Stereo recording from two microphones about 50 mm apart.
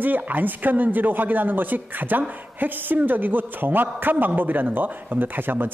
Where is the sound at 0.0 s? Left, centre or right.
Right.